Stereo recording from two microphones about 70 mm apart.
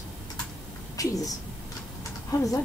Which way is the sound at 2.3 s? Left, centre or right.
Left.